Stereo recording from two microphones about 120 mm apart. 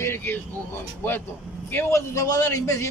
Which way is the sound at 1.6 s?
20° left (ahead or behind).